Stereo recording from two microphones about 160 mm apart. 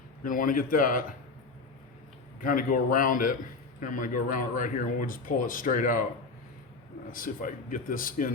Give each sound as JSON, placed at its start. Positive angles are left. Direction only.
{"t": 0.3, "sound": "speech", "side_deg": 60}
{"t": 2.4, "sound": "speech", "side_deg": 60}
{"t": 7.1, "sound": "speech", "side_deg": 60}